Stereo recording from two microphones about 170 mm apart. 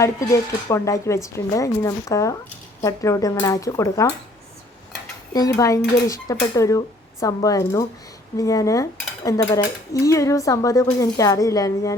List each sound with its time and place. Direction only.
0.0 s dishes: 20° left (ahead or behind)
5.3 s dishes: 20° left (ahead or behind)